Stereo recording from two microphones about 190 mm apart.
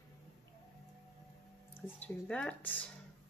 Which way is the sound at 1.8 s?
5° left (ahead or behind).